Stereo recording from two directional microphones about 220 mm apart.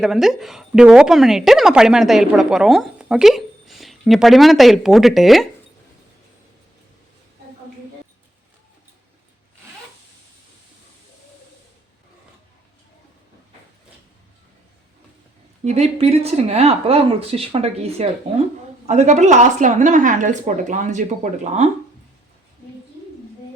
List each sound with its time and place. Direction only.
0.0 s a woman's voice: centre (ahead or behind)
15.6 s speech: 30° right (ahead or behind)